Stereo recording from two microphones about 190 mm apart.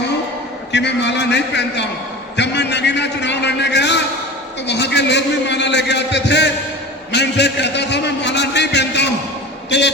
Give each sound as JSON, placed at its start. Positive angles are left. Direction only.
{"t": 0.7, "sound": "a man's voice", "side_deg": 65}